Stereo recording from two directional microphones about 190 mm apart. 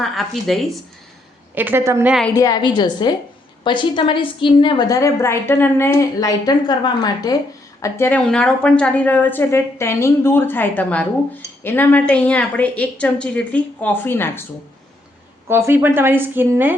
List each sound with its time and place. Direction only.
0.0 s speech: centre (ahead or behind)
1.5 s speech: 10° right (ahead or behind)
2.3 s a woman's voice: 20° left (ahead or behind)
15.4 s speech: 15° right (ahead or behind)